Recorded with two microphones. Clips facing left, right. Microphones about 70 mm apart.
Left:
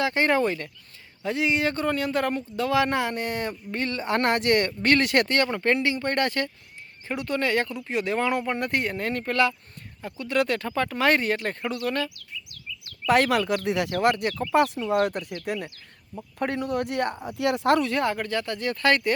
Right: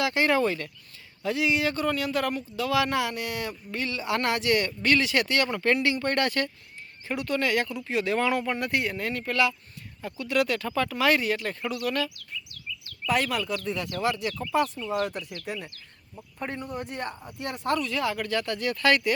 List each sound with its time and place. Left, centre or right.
0.0 s speech: left
5.6 s speech: left
8.5 s speech: left
13.1 s speech: left
16.4 s speech: left
17.2 s speech: left
18.0 s speech: left